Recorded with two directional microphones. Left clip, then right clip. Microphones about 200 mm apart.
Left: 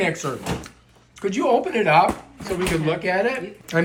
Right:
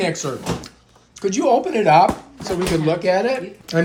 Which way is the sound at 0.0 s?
10° right (ahead or behind).